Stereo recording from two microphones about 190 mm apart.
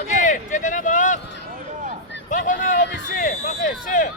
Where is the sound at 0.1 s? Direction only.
40° left (ahead or behind).